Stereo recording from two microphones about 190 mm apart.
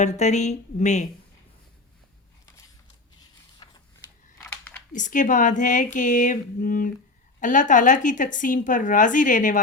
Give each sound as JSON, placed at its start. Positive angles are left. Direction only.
{"t": 0.0, "sound": "speech", "side_deg": 35}
{"t": 3.6, "sound": "a sound", "side_deg": 25}
{"t": 4.9, "sound": "a woman's voice", "side_deg": 40}